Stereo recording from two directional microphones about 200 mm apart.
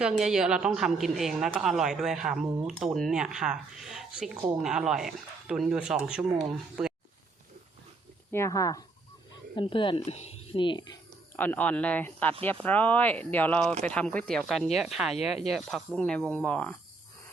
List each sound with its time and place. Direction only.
0.0 s a woman's voice: 5° right (ahead or behind)
8.3 s speech: 15° left (ahead or behind)
11.3 s a woman's voice: 10° left (ahead or behind)